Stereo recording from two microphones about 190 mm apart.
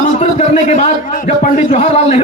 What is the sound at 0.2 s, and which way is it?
A man's voice, 40° left (ahead or behind).